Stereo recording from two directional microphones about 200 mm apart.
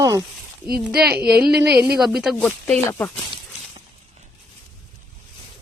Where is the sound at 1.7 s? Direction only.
50° right (ahead or behind).